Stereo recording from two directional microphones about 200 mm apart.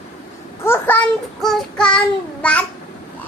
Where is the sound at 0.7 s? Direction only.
10° left (ahead or behind).